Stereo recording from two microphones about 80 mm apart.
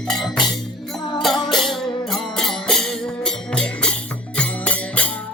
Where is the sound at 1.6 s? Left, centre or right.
Centre.